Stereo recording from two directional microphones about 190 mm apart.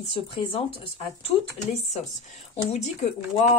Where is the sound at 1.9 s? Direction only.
35° left (ahead or behind).